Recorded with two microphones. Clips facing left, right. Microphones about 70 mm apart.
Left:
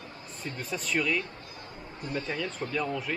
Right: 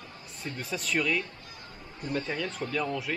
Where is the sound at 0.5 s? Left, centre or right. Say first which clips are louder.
Even; centre.